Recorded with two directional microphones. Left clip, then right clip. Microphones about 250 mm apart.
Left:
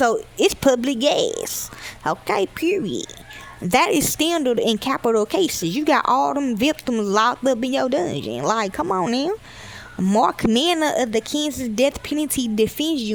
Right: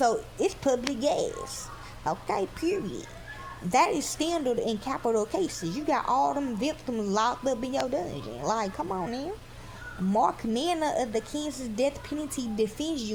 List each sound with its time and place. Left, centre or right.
0.0 s speech: left